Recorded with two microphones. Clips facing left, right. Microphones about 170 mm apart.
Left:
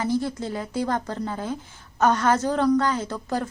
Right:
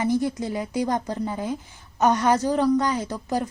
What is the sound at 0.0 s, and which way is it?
Speech, 15° right (ahead or behind).